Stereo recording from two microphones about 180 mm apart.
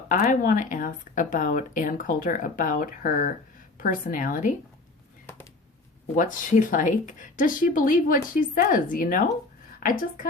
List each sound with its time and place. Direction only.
0.1 s speech: 45° left (ahead or behind)
6.1 s speech: 45° left (ahead or behind)